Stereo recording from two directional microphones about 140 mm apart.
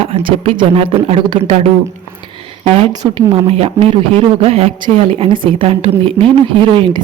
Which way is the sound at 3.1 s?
45° right (ahead or behind).